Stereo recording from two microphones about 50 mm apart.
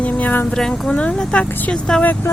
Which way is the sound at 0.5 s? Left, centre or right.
Centre.